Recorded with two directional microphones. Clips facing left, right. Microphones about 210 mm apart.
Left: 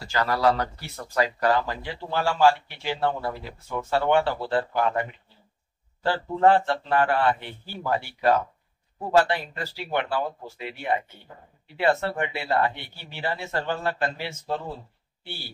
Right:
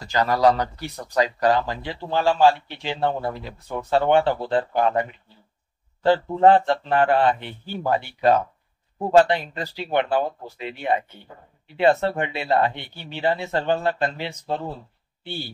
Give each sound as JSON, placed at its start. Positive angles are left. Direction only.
{"t": 0.2, "sound": "speech", "side_deg": -40}
{"t": 1.0, "sound": "speech", "side_deg": -20}
{"t": 6.0, "sound": "speech", "side_deg": -20}